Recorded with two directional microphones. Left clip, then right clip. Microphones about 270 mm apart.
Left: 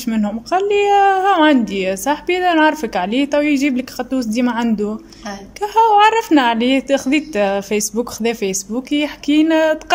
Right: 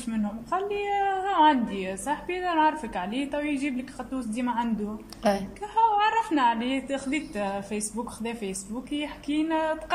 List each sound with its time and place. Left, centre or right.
0.1 s a woman's voice: left